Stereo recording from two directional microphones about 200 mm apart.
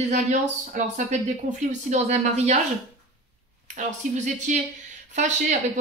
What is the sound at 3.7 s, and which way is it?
Speech, 35° right (ahead or behind).